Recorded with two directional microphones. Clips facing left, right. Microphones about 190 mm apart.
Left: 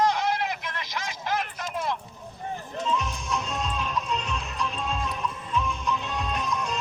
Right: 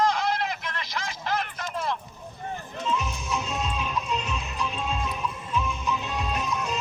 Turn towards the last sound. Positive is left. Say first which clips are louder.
# even
turn(degrees=-5)  # may be behind; listen again after turning